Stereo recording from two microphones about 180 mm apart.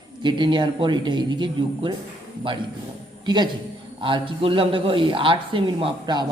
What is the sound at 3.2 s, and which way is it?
A man's voice, 25° right (ahead or behind).